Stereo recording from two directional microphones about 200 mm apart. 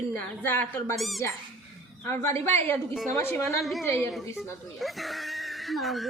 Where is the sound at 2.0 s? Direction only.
15° left (ahead or behind).